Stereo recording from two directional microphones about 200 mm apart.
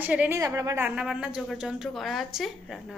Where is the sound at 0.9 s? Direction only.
5° right (ahead or behind).